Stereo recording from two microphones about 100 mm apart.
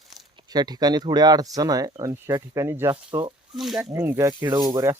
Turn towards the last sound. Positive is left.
turn(degrees=-40)  # may be behind; listen again after turning